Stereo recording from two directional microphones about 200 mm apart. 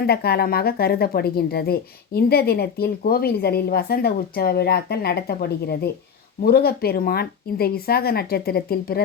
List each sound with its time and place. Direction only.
0.0 s a woman's voice: 50° left (ahead or behind)